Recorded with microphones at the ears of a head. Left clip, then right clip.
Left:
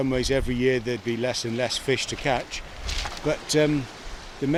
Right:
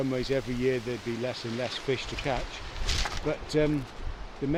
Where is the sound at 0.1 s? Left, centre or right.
Left.